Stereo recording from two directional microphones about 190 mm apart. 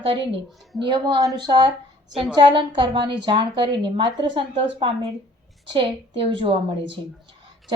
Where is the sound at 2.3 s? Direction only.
25° right (ahead or behind).